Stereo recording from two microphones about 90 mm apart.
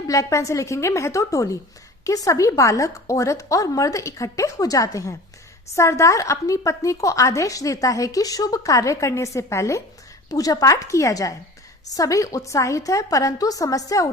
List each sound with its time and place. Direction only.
0.1 s a woman's voice: 35° left (ahead or behind)